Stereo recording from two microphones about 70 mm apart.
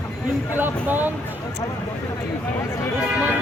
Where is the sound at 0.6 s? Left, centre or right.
Right.